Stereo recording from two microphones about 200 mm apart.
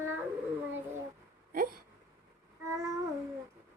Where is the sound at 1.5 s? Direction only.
45° right (ahead or behind).